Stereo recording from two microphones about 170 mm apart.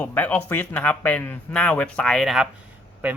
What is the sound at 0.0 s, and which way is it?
Speech, 10° left (ahead or behind).